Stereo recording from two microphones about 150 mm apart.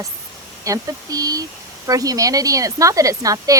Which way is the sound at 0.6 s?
20° right (ahead or behind).